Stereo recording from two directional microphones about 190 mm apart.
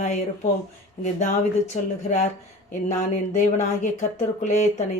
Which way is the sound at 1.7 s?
35° left (ahead or behind).